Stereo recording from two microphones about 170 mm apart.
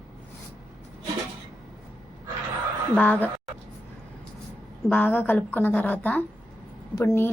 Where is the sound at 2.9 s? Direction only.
10° left (ahead or behind).